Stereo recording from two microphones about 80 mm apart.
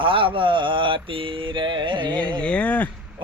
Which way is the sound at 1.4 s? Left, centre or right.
Right.